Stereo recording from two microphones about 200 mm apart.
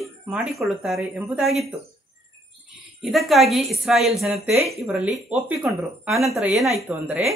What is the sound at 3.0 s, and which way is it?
Speech, centre (ahead or behind).